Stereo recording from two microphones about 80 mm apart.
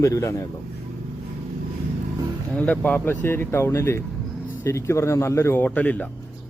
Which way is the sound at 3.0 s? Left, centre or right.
Left.